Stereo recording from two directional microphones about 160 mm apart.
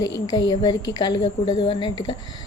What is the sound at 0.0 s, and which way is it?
A woman's voice, 25° left (ahead or behind).